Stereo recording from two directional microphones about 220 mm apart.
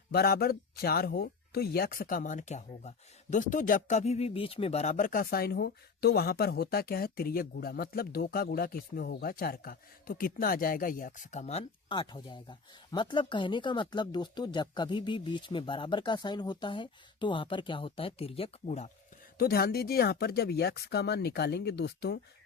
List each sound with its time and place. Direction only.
0.1 s speech: 45° left (ahead or behind); by 18.9 s 30° left (ahead or behind)
19.4 s speech: 45° left (ahead or behind)